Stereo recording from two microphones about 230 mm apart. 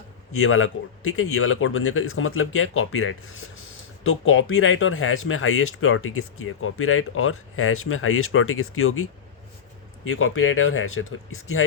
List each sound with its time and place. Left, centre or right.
0.3 s speech: left
10.1 s speech: left